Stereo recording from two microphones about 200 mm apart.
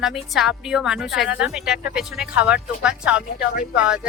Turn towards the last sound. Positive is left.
turn(degrees=-5)  # may be behind; listen again after turning